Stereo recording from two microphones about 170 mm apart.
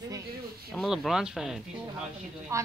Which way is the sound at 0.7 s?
Centre (ahead or behind).